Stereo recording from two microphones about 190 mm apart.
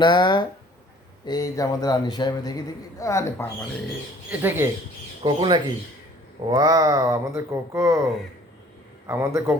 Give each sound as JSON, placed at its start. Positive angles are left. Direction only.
{"t": 0.0, "sound": "a man's voice", "side_deg": 25}
{"t": 4.3, "sound": "speech", "side_deg": -10}
{"t": 5.2, "sound": "speech", "side_deg": -25}
{"t": 9.0, "sound": "speech", "side_deg": -15}